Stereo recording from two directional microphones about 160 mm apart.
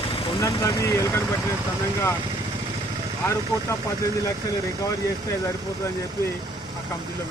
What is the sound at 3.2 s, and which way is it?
Speech, 20° left (ahead or behind).